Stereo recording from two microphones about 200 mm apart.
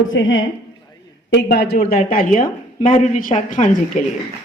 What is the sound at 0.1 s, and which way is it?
A woman's voice, 70° left (ahead or behind).